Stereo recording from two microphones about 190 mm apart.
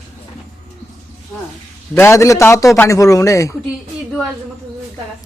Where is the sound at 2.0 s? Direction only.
15° left (ahead or behind).